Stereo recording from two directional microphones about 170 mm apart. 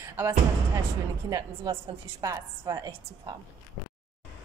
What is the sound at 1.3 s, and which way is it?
A woman's voice, 15° right (ahead or behind).